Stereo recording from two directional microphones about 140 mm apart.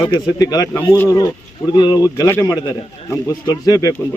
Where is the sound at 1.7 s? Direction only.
30° left (ahead or behind).